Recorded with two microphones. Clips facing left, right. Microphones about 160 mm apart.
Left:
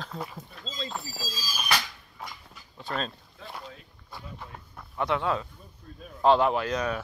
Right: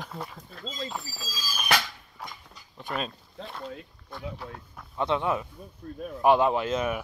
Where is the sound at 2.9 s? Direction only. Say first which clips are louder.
Even; 10° right (ahead or behind).